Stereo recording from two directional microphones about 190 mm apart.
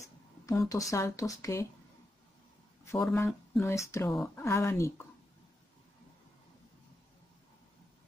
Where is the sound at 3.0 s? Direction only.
5° left (ahead or behind).